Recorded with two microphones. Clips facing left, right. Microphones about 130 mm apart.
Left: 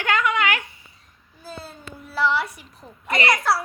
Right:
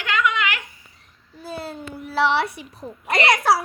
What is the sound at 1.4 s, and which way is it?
A child's voice, 70° right (ahead or behind).